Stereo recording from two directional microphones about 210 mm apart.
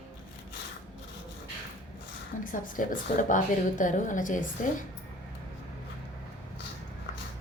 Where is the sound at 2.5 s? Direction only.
40° left (ahead or behind).